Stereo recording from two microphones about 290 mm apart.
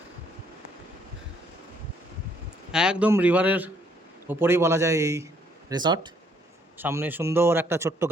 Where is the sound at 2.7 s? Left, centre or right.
Centre.